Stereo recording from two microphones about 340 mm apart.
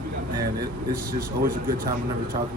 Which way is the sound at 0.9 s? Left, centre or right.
Right.